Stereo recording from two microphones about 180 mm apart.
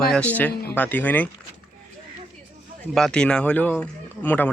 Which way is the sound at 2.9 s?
5° left (ahead or behind).